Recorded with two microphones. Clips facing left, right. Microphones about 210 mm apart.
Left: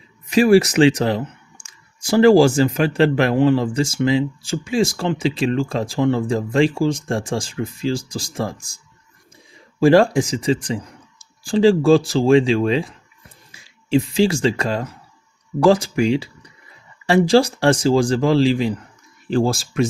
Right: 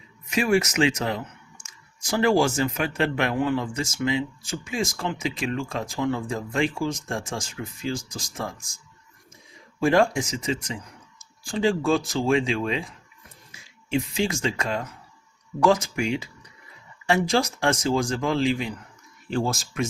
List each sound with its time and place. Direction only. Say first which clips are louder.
0.3 s speech: left 9 dB; 35° left (ahead or behind)
9.8 s speech: left 7 dB; 35° left (ahead or behind)